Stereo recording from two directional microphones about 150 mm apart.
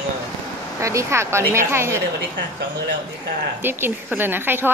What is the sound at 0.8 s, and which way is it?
A woman's voice, 20° right (ahead or behind).